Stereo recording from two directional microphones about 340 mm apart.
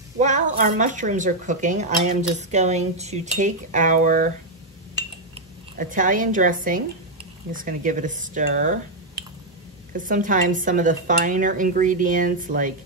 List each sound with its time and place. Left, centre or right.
0.2 s a sound: right
0.7 s speech: right
5.8 s speech: right